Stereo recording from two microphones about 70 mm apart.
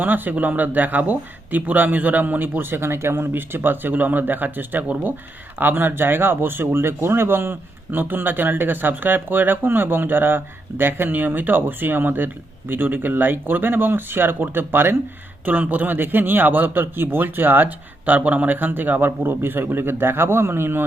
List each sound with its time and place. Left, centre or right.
0.0 s a man's voice: right